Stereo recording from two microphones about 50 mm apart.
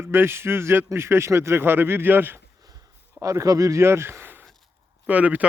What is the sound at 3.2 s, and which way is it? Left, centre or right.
Speech, right.